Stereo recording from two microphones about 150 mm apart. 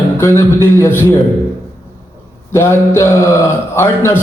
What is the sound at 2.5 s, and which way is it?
A man's voice, 20° left (ahead or behind).